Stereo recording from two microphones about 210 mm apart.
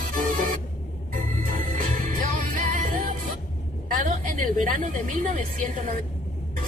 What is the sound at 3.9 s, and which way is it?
A woman's voice, 40° right (ahead or behind).